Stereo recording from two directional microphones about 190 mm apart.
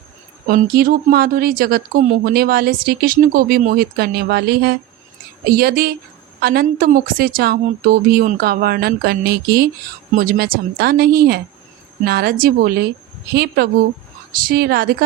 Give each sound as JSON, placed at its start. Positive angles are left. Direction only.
{"t": 0.4, "sound": "a woman's voice", "side_deg": -50}